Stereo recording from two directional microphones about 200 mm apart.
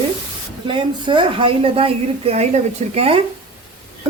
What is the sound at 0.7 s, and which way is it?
A woman's voice, 25° right (ahead or behind).